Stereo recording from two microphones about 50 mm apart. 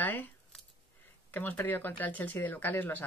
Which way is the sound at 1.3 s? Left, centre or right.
Left.